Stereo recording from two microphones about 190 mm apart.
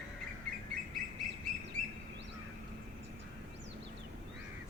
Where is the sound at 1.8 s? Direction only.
40° right (ahead or behind).